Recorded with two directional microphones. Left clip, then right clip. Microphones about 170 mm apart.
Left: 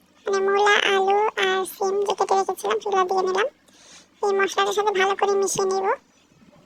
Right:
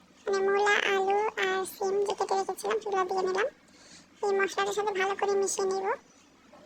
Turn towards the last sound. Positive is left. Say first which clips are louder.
# left 7 dB
turn(degrees=30)  # may be behind; listen again after turning